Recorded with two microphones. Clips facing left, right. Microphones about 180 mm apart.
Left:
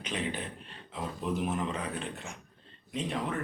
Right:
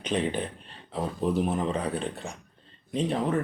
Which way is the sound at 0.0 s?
30° right (ahead or behind).